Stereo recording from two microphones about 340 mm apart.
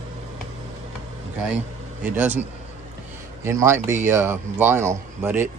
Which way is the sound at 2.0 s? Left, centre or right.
Centre.